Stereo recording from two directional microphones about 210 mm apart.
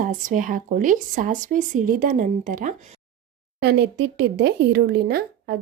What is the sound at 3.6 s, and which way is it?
Speech, 55° right (ahead or behind).